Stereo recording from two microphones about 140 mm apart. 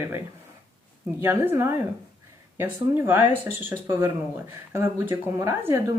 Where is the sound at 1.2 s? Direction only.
15° right (ahead or behind).